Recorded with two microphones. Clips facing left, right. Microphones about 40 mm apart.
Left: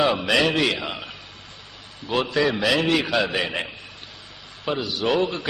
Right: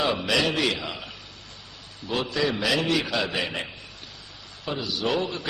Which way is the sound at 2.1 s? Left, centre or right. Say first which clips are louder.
Left 4 dB; left.